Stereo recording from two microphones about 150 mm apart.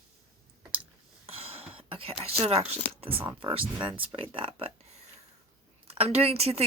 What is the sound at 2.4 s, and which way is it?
Speech, 40° right (ahead or behind).